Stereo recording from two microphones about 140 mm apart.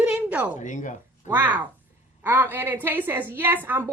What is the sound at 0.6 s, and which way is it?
Speech, 65° left (ahead or behind).